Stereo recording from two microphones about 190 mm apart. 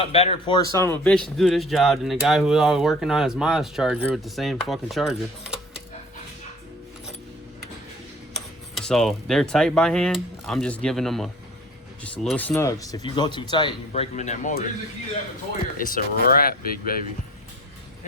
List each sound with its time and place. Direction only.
0.0 s speech: 30° left (ahead or behind); by 5.8 s 5° right (ahead or behind)
8.3 s speech: centre (ahead or behind); by 14.5 s 40° left (ahead or behind)
15.8 s speech: 45° left (ahead or behind)